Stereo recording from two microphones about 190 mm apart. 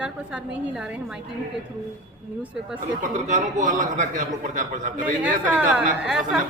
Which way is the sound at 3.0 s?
40° right (ahead or behind).